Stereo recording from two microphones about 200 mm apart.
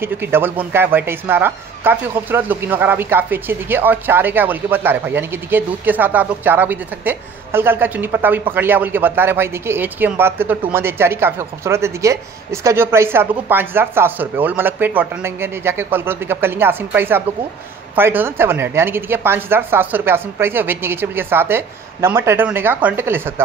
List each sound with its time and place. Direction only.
0.0 s speech: 10° right (ahead or behind)